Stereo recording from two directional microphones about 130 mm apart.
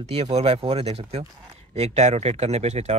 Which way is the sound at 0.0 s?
50° right (ahead or behind).